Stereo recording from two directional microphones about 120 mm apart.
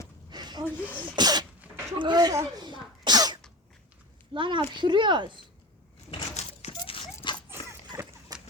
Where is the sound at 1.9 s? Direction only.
40° right (ahead or behind).